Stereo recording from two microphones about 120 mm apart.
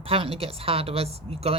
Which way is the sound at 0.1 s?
50° right (ahead or behind).